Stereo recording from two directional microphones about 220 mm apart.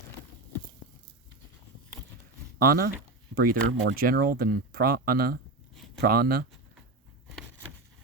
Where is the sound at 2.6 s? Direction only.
45° right (ahead or behind).